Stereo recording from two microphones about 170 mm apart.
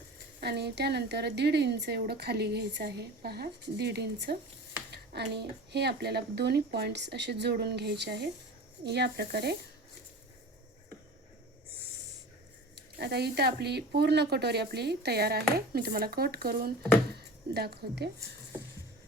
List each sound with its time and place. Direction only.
0.3 s a woman's voice: 75° right (ahead or behind)
12.7 s a woman's voice: 75° right (ahead or behind)